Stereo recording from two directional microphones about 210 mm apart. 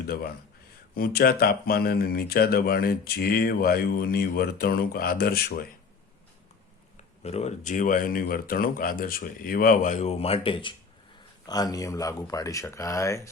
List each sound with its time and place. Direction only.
0.9 s speech: 45° left (ahead or behind)
6.9 s speech: 30° left (ahead or behind); by 13.3 s 15° left (ahead or behind)